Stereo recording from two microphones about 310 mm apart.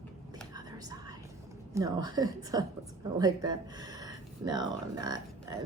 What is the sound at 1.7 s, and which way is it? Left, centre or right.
A woman's voice, centre.